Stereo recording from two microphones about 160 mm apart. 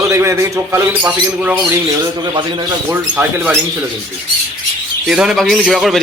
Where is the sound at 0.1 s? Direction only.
15° right (ahead or behind).